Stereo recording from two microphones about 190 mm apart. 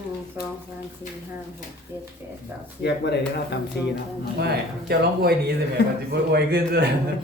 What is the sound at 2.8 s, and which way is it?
Speech, 65° left (ahead or behind).